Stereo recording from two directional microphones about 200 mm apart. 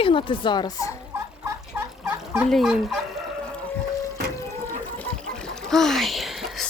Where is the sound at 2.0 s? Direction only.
10° right (ahead or behind).